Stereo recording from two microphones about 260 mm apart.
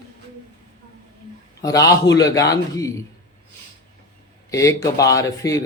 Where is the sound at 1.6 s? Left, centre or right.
Centre.